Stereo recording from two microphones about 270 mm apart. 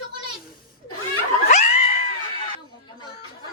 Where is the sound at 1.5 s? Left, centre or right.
Left.